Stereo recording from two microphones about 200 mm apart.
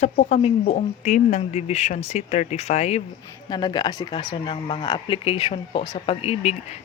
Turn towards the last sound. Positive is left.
turn(degrees=30)  # may be behind; listen again after turning